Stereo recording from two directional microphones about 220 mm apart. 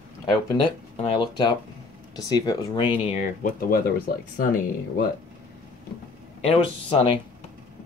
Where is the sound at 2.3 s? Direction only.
15° left (ahead or behind).